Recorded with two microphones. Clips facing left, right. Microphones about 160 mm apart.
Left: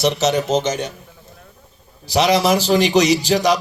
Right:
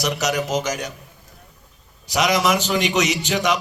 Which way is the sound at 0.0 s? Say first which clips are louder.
Left 5 dB; 30° left (ahead or behind).